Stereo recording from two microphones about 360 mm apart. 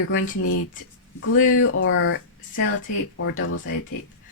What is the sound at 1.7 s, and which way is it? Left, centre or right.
Speech, left.